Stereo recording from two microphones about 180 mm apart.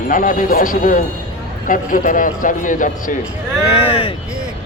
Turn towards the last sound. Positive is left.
turn(degrees=30)  # may be behind; listen again after turning